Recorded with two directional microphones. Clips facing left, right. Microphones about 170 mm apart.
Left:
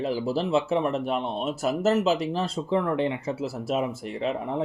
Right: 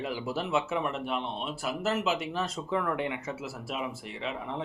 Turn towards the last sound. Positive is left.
turn(degrees=45)  # may be behind; listen again after turning